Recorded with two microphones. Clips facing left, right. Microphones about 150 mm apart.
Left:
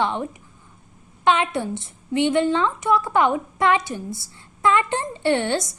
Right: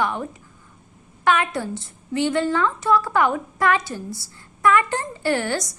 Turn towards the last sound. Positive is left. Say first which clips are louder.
# left 2 dB
turn(degrees=25)  # may be behind; listen again after turning